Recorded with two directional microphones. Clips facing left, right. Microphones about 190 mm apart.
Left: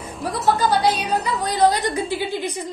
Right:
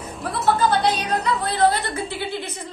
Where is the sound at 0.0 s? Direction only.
Centre (ahead or behind).